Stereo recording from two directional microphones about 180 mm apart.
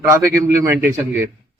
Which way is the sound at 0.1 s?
15° right (ahead or behind).